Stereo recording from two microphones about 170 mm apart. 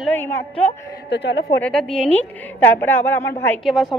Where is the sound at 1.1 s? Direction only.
90° left.